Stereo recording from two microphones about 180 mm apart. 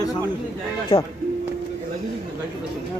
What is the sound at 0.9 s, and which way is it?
Speech, 30° left (ahead or behind).